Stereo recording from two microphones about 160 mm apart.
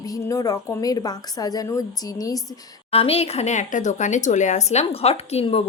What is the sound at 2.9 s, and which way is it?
A woman's voice, 35° left (ahead or behind).